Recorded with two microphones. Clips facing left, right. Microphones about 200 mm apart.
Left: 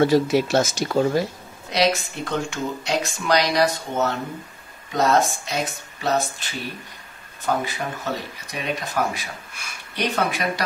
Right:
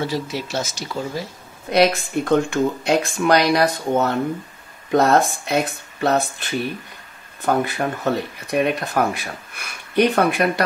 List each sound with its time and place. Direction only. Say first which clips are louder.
0.0 s speech: left 8 dB; 55° left (ahead or behind)
1.7 s speech: right 4 dB; 55° right (ahead or behind)